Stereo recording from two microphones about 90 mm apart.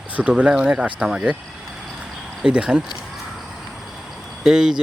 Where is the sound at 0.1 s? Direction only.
15° right (ahead or behind).